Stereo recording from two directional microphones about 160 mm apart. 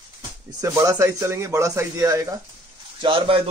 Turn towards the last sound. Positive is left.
turn(degrees=-30)  # may be behind; listen again after turning